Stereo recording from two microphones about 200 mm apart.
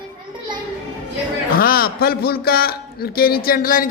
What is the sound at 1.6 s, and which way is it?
A man's voice, 50° left (ahead or behind).